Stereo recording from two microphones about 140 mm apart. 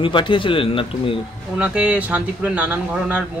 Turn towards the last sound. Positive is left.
turn(degrees=-10)  # may be behind; listen again after turning